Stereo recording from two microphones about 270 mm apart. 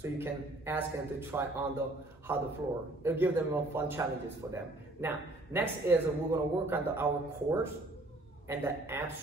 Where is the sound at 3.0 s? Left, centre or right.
Centre.